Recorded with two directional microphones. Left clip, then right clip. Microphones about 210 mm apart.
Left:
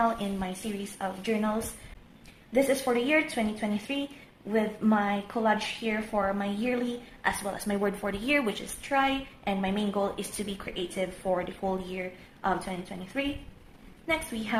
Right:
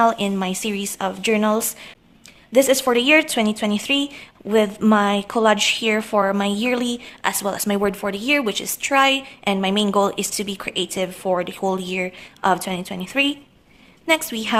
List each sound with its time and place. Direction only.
0.0 s a woman's voice: 45° right (ahead or behind)
8.8 s a woman's voice: 50° right (ahead or behind)